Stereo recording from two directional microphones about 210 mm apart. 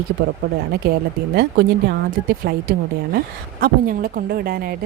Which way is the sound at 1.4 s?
55° right (ahead or behind).